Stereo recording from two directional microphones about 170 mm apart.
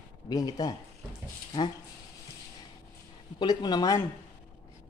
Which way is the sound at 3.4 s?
25° left (ahead or behind).